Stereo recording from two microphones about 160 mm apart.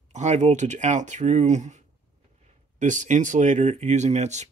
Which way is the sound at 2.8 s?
50° right (ahead or behind).